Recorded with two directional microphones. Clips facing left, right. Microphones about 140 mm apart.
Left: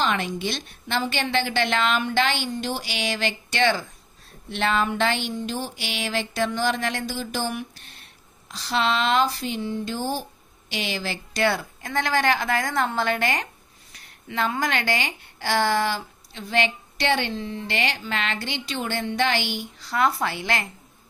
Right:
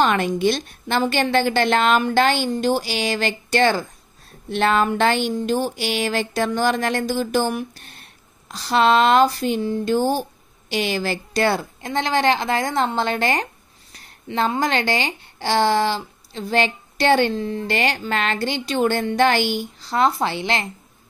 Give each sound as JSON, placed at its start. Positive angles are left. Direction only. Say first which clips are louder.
{"t": 0.0, "sound": "a woman's voice", "louder": "right 7 dB", "side_deg": -50}
{"t": 19.8, "sound": "a woman's voice", "louder": "right 3 dB", "side_deg": -30}